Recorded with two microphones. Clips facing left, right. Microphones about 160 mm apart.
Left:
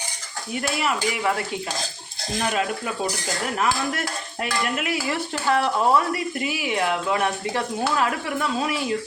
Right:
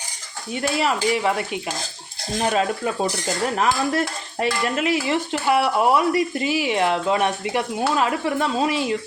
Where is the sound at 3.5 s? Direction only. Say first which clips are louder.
Right 3 dB; 30° right (ahead or behind).